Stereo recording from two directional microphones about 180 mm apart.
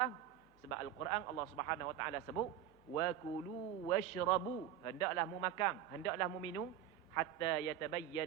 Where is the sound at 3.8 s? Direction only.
20° left (ahead or behind).